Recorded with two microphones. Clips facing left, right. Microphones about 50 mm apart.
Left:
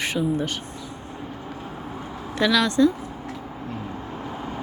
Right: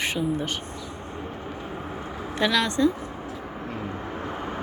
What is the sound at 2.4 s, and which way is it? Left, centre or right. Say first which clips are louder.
Speech: left 3 dB; right.